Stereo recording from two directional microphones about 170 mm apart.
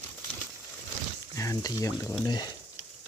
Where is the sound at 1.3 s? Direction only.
20° left (ahead or behind).